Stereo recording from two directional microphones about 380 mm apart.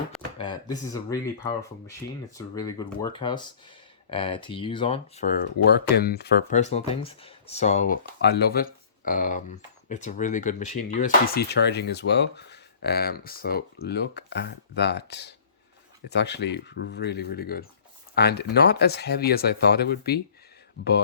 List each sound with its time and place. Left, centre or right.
0.3 s speech: centre